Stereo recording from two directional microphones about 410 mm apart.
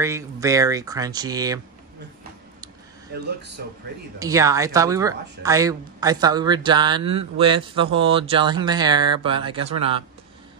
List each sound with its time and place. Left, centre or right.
0.0 s speech: centre
3.6 s speech: right
4.2 s speech: centre